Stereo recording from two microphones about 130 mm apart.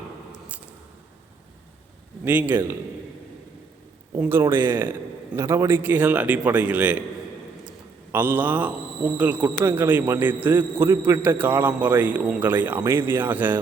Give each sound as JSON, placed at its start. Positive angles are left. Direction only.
{"t": 0.3, "sound": "scissors", "side_deg": -10}
{"t": 2.2, "sound": "a man's voice", "side_deg": -15}
{"t": 4.2, "sound": "a man's voice", "side_deg": -20}
{"t": 8.1, "sound": "a man's voice", "side_deg": -15}